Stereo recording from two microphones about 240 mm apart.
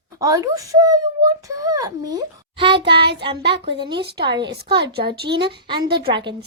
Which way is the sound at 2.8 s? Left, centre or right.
Right.